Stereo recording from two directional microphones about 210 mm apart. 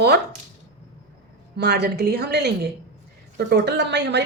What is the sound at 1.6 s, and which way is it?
A woman's voice, 50° right (ahead or behind).